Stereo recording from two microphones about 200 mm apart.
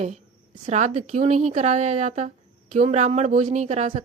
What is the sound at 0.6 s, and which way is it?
Speech, 35° right (ahead or behind).